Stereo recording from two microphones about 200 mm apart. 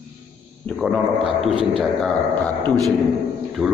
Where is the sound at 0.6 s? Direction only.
Centre (ahead or behind).